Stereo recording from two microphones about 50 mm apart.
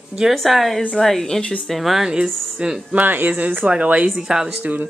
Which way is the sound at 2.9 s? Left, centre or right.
Right.